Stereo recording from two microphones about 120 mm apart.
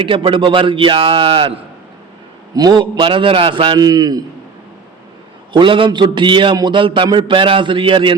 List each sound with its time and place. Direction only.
0.0 s a man's voice: 45° right (ahead or behind)
2.6 s a man's voice: 35° right (ahead or behind)
3.8 s a man's voice: 30° right (ahead or behind)
5.5 s a man's voice: 45° right (ahead or behind)